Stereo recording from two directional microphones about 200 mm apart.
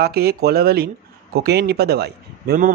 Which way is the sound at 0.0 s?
50° right (ahead or behind).